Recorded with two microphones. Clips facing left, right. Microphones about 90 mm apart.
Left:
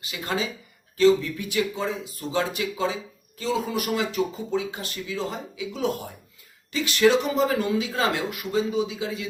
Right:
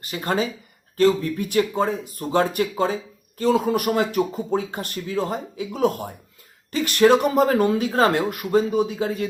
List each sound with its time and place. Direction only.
0.0 s speech: 50° right (ahead or behind)